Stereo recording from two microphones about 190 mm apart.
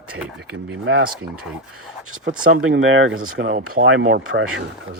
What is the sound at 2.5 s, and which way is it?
Speech, 90° right.